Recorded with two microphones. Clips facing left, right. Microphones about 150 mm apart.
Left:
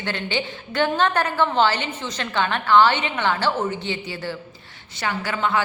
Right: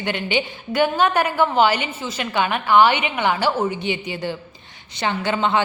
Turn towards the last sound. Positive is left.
turn(degrees=-20)  # may be behind; listen again after turning